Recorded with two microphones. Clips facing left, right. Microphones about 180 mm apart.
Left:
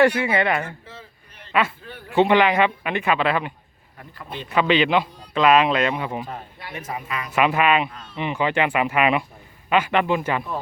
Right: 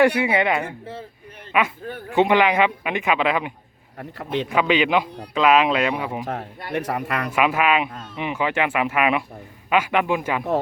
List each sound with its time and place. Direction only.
0.0 s a man's voice: 15° right (ahead or behind)
3.9 s speech: 75° right (ahead or behind)
4.4 s a man's voice: 10° right (ahead or behind)
6.2 s speech: 75° right (ahead or behind)
7.3 s a man's voice: 5° right (ahead or behind)